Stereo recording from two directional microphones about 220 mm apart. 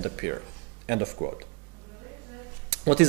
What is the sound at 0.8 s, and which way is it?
Speech, 20° right (ahead or behind).